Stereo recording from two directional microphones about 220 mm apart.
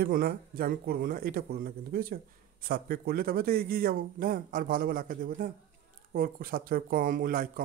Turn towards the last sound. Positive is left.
turn(degrees=-40)  # may be behind; listen again after turning